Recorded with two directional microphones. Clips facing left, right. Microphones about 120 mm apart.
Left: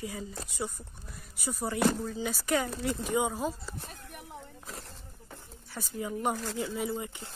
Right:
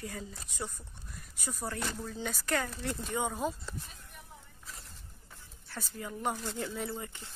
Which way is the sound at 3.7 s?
70° left (ahead or behind).